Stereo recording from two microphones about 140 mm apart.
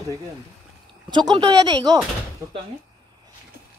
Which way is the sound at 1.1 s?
35° right (ahead or behind).